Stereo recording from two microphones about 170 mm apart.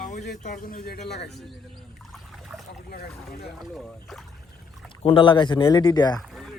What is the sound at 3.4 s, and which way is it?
Speech, centre (ahead or behind).